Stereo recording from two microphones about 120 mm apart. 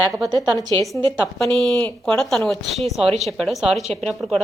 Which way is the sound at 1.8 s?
15° left (ahead or behind).